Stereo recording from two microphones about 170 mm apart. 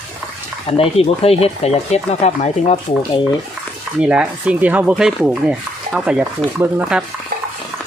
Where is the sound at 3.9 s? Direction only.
5° right (ahead or behind).